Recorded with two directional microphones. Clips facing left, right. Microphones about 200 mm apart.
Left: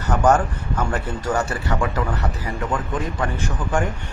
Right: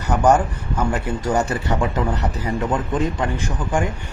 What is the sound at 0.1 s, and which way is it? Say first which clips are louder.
Speech: right 1 dB; 10° right (ahead or behind).